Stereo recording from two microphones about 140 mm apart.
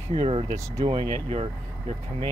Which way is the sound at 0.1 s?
40° right (ahead or behind).